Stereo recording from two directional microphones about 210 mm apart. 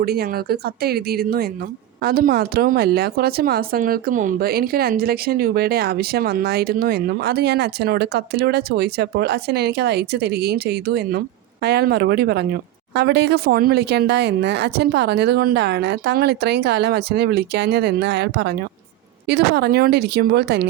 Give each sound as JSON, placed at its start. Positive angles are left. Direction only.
{"t": 0.0, "sound": "speech", "side_deg": -50}